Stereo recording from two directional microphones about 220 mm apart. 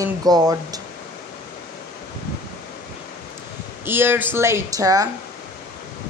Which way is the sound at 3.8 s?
10° right (ahead or behind).